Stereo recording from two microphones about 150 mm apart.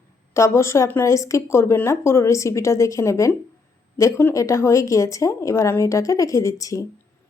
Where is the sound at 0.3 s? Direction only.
20° left (ahead or behind).